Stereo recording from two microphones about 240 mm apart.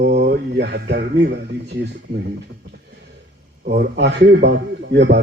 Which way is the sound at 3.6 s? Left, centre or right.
Right.